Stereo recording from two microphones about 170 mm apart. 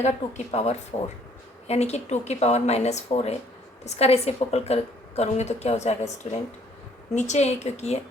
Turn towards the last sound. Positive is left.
turn(degrees=40)  # may be behind; listen again after turning